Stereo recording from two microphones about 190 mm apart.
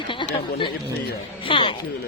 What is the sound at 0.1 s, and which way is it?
Chatter, 25° left (ahead or behind).